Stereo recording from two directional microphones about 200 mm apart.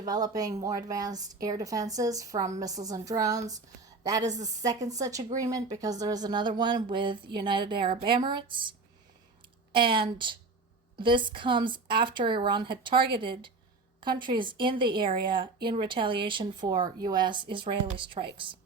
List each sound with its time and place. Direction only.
0.0 s a woman's voice: 20° right (ahead or behind)
9.7 s speech: 25° right (ahead or behind)